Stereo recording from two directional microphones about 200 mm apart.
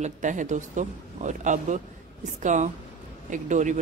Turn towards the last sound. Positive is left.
turn(degrees=-40)  # may be behind; listen again after turning